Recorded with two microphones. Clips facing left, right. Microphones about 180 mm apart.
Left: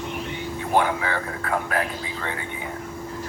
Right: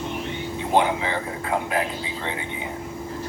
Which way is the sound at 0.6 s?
20° right (ahead or behind).